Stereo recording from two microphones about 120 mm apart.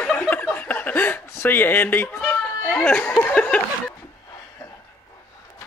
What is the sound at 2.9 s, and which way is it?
Speech, 10° left (ahead or behind).